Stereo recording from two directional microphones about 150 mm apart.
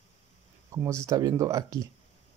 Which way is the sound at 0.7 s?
20° right (ahead or behind).